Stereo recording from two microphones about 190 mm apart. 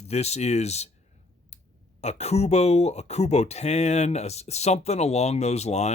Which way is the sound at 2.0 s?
35° left (ahead or behind).